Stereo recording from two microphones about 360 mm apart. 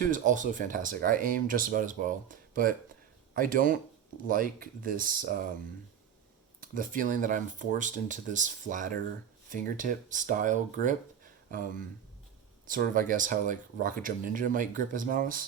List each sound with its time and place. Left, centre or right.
0.0 s speech: right
6.6 s speech: right